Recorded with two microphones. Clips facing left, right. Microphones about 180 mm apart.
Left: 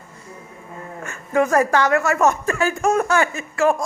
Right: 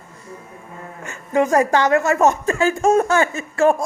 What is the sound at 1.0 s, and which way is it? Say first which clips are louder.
A woman's voice: right 1 dB; 20° right (ahead or behind).